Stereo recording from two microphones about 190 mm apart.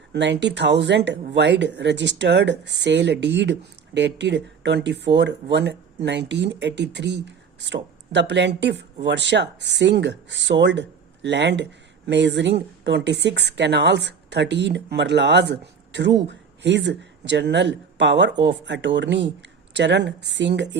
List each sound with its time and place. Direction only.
0.1 s speech: 65° right (ahead or behind)